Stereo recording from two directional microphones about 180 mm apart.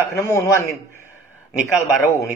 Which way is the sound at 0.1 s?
15° left (ahead or behind).